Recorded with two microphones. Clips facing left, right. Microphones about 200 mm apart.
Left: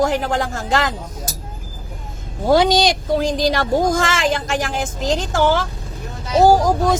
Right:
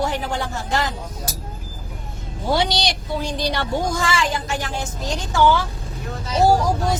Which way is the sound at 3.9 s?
90° left.